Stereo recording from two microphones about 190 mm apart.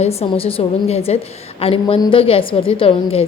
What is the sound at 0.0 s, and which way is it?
A woman's voice, 30° left (ahead or behind).